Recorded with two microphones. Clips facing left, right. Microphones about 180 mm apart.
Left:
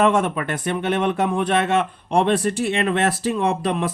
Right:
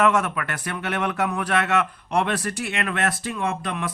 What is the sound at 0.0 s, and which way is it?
Speech, 25° left (ahead or behind).